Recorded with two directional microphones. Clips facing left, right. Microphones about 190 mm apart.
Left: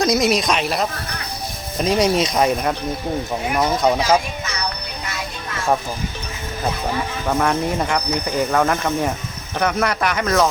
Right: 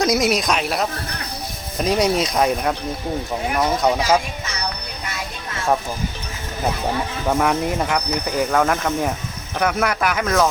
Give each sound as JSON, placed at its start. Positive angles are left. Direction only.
{"t": 0.0, "sound": "speech", "side_deg": -5}
{"t": 7.3, "sound": "speech", "side_deg": 0}